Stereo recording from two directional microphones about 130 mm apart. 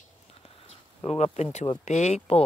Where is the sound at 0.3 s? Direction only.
50° left (ahead or behind).